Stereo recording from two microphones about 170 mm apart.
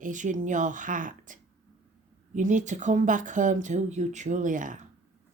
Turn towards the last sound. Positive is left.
turn(degrees=-50)  # may be behind; listen again after turning